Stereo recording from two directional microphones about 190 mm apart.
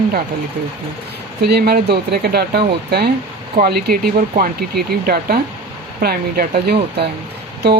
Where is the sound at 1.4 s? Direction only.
60° right (ahead or behind).